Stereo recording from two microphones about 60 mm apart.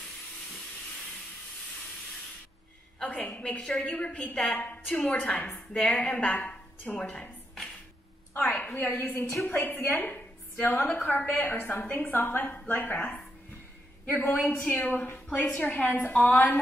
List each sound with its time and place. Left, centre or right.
3.0 s a sound: left
3.3 s a woman's voice: left
4.9 s a woman's voice: left
8.4 s a sound: left
8.7 s a woman's voice: left
14.1 s a woman's voice: left